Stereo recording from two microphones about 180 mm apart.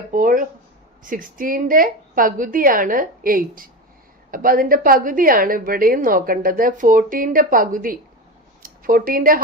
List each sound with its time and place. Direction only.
0.1 s a woman's voice: 50° right (ahead or behind)